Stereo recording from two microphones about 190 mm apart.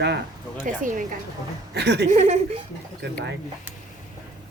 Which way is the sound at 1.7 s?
60° right (ahead or behind).